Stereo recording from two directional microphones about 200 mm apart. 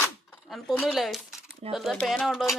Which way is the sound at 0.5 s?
Centre (ahead or behind).